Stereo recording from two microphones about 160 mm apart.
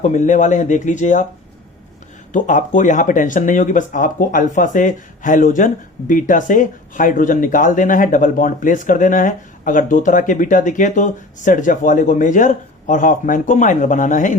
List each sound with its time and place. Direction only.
0.0 s speech: 50° left (ahead or behind)
2.3 s speech: 50° left (ahead or behind)